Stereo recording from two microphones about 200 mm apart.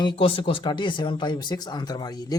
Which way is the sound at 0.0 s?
25° left (ahead or behind).